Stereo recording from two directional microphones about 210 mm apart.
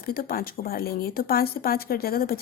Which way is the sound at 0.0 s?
45° left (ahead or behind).